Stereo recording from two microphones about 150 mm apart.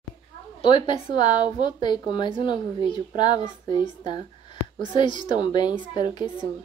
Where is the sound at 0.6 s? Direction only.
35° left (ahead or behind).